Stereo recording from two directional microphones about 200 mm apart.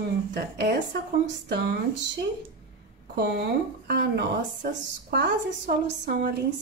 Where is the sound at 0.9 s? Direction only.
60° right (ahead or behind).